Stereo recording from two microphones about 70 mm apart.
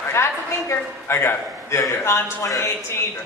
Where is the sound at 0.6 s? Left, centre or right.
Left.